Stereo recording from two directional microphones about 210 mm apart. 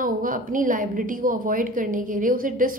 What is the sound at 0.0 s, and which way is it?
A woman's voice, 40° right (ahead or behind).